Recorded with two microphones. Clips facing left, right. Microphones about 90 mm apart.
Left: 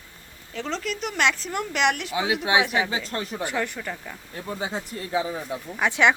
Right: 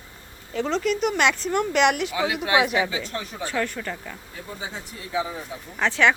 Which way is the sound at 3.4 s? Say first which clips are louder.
Right 2 dB; 15° left (ahead or behind).